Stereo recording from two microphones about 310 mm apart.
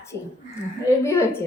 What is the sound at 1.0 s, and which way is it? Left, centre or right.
Speech, centre.